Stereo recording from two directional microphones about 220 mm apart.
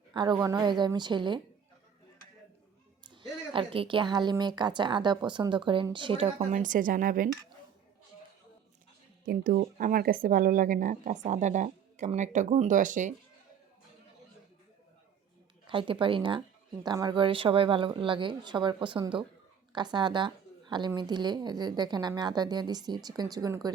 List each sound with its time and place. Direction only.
0.1 s a woman's voice: 20° right (ahead or behind)
3.5 s a woman's voice: 25° right (ahead or behind)
6.5 s speech: 35° right (ahead or behind)
9.2 s speech: 40° right (ahead or behind)
15.6 s a woman's voice: 25° right (ahead or behind)